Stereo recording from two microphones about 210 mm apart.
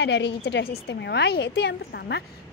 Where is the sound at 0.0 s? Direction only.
55° left (ahead or behind).